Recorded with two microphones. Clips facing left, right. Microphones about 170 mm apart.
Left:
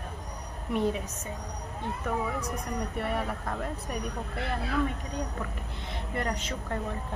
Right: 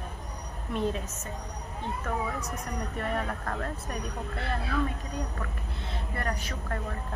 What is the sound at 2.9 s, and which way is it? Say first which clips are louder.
Speech: right 1 dB; 10° left (ahead or behind).